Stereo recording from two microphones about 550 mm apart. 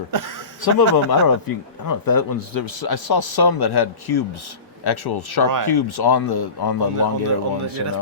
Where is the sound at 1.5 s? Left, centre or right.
Left.